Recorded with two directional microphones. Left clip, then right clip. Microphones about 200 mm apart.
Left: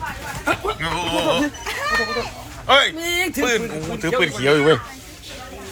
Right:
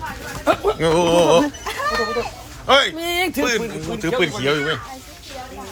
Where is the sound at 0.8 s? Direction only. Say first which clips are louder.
Right 6 dB; 40° right (ahead or behind).